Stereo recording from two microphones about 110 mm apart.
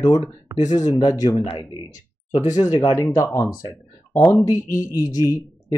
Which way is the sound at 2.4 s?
35° left (ahead or behind).